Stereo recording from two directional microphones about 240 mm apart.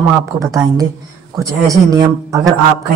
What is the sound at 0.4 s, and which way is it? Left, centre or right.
Speech, centre.